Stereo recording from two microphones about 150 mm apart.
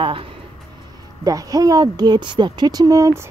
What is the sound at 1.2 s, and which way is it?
A woman's voice, 25° right (ahead or behind).